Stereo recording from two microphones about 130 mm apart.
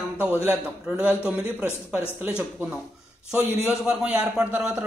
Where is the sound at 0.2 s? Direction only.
15° right (ahead or behind).